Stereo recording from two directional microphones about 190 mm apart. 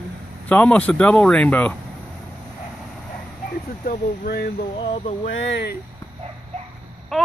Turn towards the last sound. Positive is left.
turn(degrees=0)  # may be behind; listen again after turning